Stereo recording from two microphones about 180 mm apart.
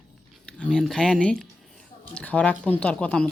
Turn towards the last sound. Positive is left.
turn(degrees=5)  # may be behind; listen again after turning